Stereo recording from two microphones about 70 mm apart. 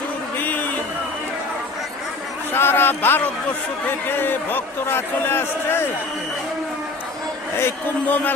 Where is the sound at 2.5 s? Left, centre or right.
Left.